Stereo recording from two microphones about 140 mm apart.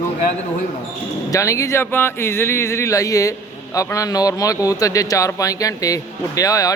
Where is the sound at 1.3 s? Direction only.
25° left (ahead or behind).